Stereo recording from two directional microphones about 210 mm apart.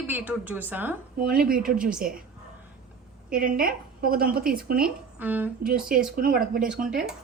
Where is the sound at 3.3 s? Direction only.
40° right (ahead or behind).